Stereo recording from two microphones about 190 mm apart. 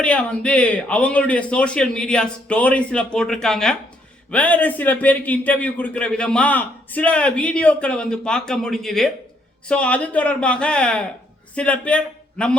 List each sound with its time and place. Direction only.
0.0 s a man's voice: 5° left (ahead or behind)